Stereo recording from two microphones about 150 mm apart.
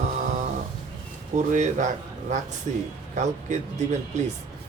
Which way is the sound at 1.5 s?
55° right (ahead or behind).